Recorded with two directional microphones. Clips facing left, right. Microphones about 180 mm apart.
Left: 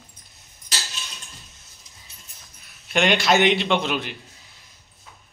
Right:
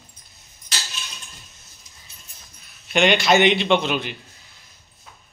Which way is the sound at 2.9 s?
Centre (ahead or behind).